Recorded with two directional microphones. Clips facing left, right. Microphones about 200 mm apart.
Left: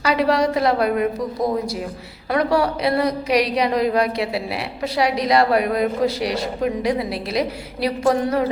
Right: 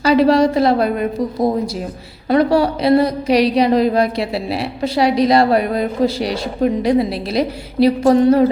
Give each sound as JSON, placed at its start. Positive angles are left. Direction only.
{"t": 0.0, "sound": "a woman's voice", "side_deg": -30}
{"t": 2.3, "sound": "a woman's voice", "side_deg": -30}